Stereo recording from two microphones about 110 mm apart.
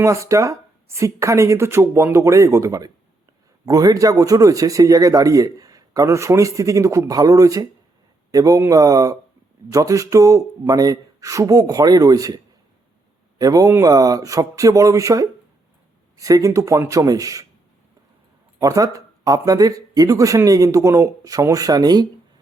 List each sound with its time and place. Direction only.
0.0 s speech: 30° right (ahead or behind)
13.4 s speech: 30° right (ahead or behind)
18.6 s speech: 30° right (ahead or behind)